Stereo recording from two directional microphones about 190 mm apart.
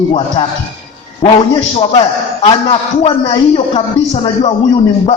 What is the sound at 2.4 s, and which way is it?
A man's voice, 30° left (ahead or behind).